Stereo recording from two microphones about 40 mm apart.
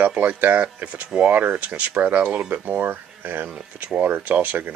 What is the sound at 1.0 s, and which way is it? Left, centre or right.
Speech, right.